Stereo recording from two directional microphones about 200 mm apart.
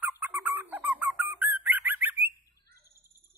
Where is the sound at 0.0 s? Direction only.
10° right (ahead or behind).